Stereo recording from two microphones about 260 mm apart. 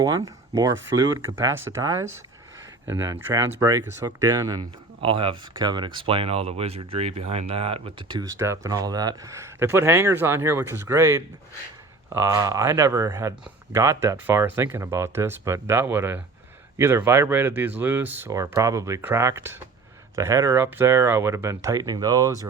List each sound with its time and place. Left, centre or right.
0.3 s speech: centre